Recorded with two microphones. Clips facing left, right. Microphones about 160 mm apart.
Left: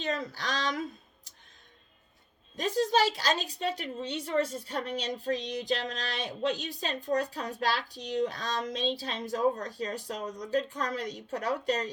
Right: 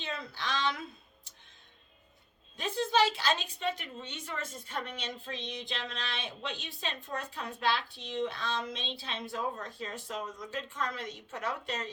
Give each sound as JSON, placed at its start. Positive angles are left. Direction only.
{"t": 0.0, "sound": "speech", "side_deg": 40}
{"t": 2.6, "sound": "a woman's voice", "side_deg": 40}